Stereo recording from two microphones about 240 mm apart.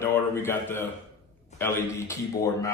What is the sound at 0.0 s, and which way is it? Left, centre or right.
A man's voice, centre.